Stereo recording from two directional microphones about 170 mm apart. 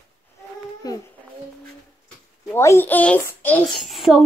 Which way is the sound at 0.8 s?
20° left (ahead or behind).